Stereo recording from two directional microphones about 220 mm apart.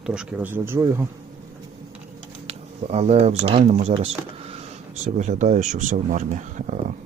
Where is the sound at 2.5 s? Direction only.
30° right (ahead or behind).